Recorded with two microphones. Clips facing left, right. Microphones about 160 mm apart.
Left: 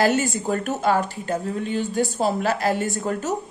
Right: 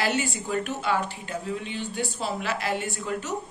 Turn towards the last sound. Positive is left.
turn(degrees=45)  # may be behind; listen again after turning